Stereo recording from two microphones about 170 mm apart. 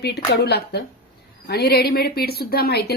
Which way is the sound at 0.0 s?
70° left (ahead or behind).